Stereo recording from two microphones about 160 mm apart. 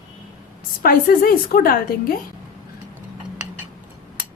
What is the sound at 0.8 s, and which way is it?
A woman's voice, 65° left (ahead or behind).